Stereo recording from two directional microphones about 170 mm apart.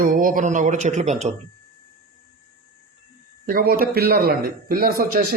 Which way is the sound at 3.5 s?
60° right (ahead or behind).